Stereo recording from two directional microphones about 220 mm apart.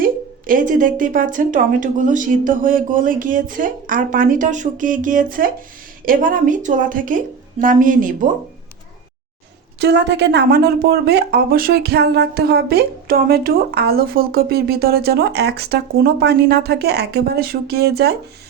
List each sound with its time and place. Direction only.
0.0 s speech: 40° right (ahead or behind)
9.7 s speech: 50° right (ahead or behind)